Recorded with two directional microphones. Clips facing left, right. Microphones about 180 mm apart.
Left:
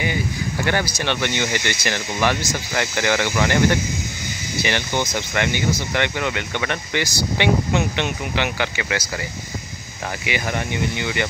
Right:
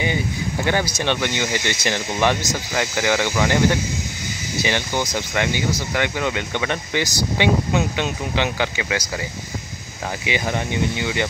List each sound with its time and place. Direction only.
0.7 s speech: 15° right (ahead or behind)
4.6 s speech: 15° right (ahead or behind)
10.2 s speech: 15° right (ahead or behind)